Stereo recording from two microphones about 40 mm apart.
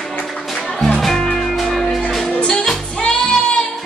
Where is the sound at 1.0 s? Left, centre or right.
Centre.